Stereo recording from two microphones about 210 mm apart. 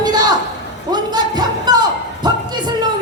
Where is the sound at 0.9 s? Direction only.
20° right (ahead or behind).